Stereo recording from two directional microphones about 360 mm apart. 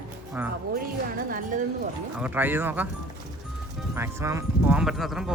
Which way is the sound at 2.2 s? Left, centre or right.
Centre.